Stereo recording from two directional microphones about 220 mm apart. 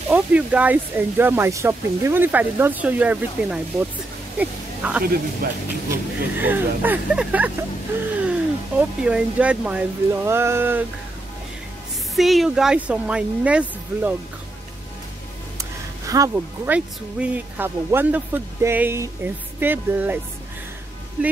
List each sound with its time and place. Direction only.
0.1 s speech: 5° right (ahead or behind)
5.0 s speech: 45° right (ahead or behind)
5.9 s speech: 10° right (ahead or behind)
12.2 s speech: centre (ahead or behind)
16.1 s speech: 10° right (ahead or behind)